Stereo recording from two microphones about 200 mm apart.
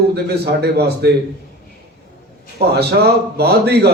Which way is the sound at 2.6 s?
55° right (ahead or behind).